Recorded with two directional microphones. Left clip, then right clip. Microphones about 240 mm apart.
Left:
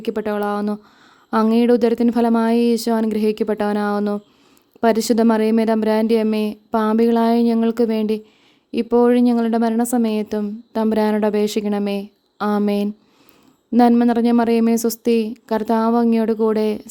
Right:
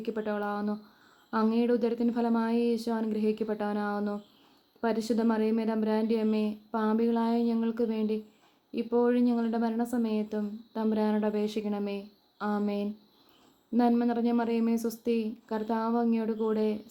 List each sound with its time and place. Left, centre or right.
0.0 s a woman's voice: left